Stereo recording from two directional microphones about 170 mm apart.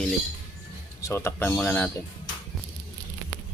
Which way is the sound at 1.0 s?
15° left (ahead or behind).